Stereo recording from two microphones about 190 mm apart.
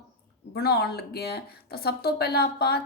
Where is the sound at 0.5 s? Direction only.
55° left (ahead or behind).